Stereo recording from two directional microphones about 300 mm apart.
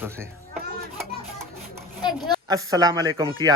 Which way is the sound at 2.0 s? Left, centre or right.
Centre.